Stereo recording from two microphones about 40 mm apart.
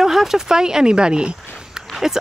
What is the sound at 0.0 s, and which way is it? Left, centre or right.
Speech, centre.